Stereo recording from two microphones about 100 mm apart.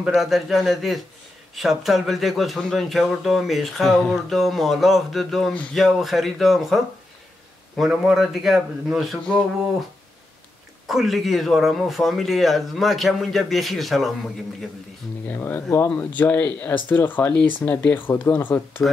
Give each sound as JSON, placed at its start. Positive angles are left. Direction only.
{"t": 0.0, "sound": "speech", "side_deg": -5}
{"t": 10.9, "sound": "speech", "side_deg": 0}
{"t": 15.2, "sound": "speech", "side_deg": 20}